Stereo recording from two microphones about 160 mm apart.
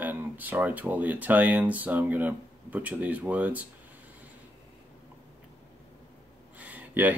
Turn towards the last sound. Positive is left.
turn(degrees=-10)  # may be behind; listen again after turning